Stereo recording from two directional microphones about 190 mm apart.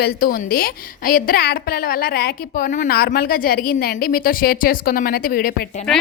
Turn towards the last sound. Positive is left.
turn(degrees=45)  # may be behind; listen again after turning